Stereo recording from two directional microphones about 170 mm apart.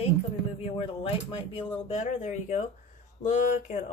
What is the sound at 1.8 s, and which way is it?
A woman's voice, 45° left (ahead or behind).